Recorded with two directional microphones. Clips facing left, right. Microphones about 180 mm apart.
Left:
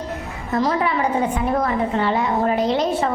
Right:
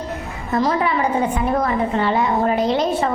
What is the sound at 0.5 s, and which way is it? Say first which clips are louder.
A woman's voice: right 1 dB; 20° right (ahead or behind).